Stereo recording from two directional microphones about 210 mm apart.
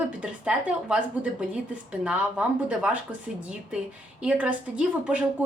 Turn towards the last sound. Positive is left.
turn(degrees=-5)  # may be behind; listen again after turning